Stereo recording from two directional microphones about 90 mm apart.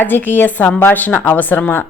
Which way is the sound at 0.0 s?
20° left (ahead or behind).